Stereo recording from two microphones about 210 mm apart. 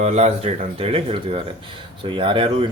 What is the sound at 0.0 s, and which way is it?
Speech, 30° right (ahead or behind).